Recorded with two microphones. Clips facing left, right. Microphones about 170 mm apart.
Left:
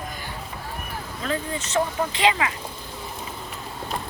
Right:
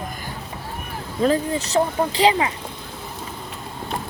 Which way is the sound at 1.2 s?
35° right (ahead or behind).